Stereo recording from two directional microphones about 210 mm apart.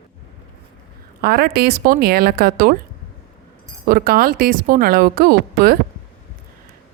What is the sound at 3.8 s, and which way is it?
Speech, 45° right (ahead or behind).